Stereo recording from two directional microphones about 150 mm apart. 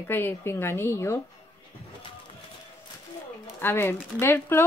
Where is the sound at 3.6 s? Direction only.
15° left (ahead or behind).